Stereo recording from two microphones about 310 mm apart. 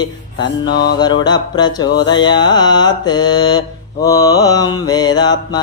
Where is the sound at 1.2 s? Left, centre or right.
Centre.